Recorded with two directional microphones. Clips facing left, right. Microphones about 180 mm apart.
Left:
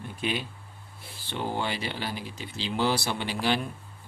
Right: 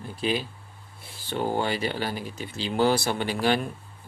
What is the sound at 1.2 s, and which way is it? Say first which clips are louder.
Speech: right 4 dB; 45° right (ahead or behind).